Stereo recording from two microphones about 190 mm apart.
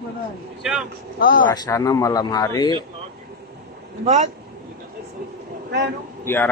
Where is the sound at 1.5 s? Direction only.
20° left (ahead or behind).